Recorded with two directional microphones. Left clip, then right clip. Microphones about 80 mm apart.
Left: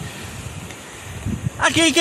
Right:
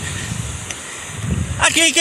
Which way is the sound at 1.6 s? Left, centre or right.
Left.